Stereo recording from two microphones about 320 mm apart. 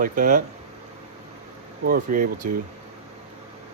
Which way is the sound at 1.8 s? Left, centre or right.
Right.